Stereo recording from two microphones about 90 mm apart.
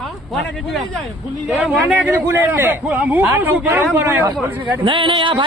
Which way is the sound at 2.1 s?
30° right (ahead or behind).